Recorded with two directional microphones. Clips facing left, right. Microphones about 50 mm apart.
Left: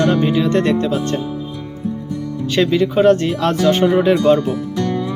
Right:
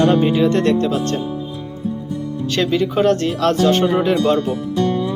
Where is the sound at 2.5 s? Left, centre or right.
Centre.